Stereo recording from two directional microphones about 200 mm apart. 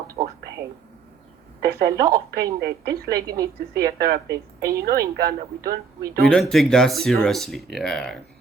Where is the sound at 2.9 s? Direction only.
15° right (ahead or behind).